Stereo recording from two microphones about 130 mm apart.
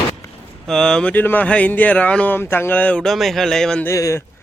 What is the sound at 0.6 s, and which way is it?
Speech, 5° left (ahead or behind).